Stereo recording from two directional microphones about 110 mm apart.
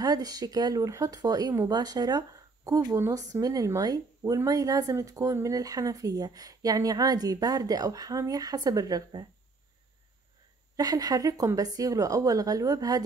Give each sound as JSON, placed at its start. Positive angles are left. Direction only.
{"t": 0.0, "sound": "speech", "side_deg": -35}
{"t": 10.8, "sound": "speech", "side_deg": -35}